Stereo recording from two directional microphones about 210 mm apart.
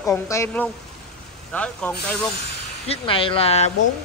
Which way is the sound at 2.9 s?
25° left (ahead or behind).